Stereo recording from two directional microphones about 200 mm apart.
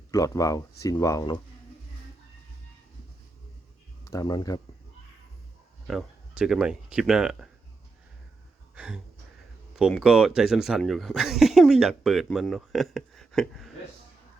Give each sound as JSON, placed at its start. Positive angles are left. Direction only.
{"t": 0.1, "sound": "speech", "side_deg": 15}
{"t": 4.1, "sound": "speech", "side_deg": 15}
{"t": 5.9, "sound": "speech", "side_deg": 0}
{"t": 8.7, "sound": "a sound", "side_deg": -5}
{"t": 9.7, "sound": "speech", "side_deg": 0}